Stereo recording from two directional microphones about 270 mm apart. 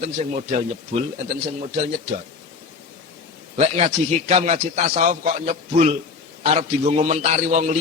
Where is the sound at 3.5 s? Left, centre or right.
Right.